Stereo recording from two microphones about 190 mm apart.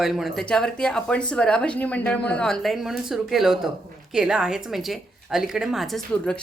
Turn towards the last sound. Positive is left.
turn(degrees=5)  # may be behind; listen again after turning